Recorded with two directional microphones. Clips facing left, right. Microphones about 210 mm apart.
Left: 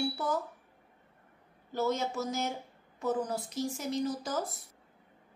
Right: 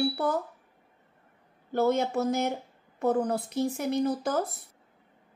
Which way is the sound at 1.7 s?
60° right (ahead or behind).